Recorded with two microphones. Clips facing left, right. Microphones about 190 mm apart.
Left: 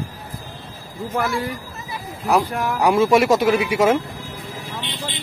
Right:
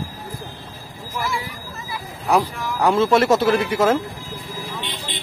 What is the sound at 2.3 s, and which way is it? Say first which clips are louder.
Speech: left 1 dB; 10° left (ahead or behind).